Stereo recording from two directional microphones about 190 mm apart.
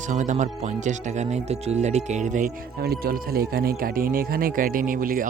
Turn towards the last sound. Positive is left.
turn(degrees=-45)  # may be behind; listen again after turning